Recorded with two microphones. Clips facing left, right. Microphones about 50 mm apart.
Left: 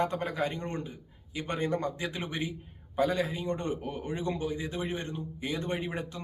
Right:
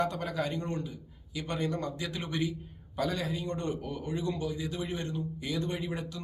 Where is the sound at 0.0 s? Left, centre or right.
Left.